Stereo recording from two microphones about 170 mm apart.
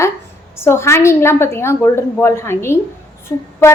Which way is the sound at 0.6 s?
15° left (ahead or behind).